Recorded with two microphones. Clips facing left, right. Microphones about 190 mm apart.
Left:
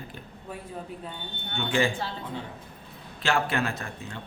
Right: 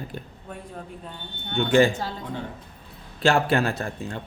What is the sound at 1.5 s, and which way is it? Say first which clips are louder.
Speech: right 7 dB; 40° right (ahead or behind).